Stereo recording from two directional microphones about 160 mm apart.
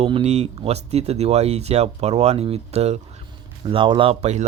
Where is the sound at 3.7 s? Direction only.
30° right (ahead or behind).